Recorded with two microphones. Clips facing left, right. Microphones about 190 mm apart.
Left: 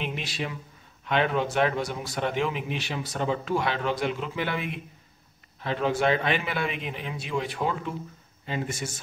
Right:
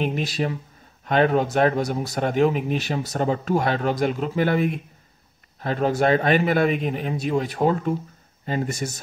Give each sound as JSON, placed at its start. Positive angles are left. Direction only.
{"t": 0.0, "sound": "speech", "side_deg": -40}